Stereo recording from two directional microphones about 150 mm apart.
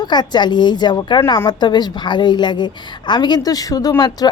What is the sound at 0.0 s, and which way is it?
A woman's voice, 30° left (ahead or behind).